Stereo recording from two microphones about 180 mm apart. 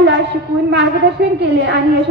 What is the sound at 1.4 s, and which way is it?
Speech, 75° right (ahead or behind).